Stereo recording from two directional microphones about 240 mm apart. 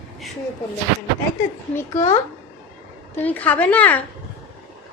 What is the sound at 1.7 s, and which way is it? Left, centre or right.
Speech, centre.